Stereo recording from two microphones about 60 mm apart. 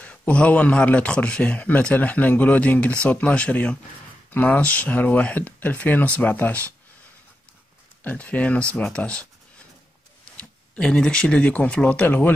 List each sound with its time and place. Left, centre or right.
0.0 s speech: left
8.0 s speech: left
10.8 s speech: centre; by 12.4 s left